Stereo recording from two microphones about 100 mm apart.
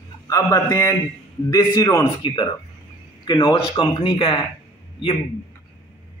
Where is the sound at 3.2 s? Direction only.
45° left (ahead or behind).